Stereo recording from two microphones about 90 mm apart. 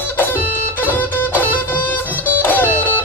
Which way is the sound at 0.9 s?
20° left (ahead or behind).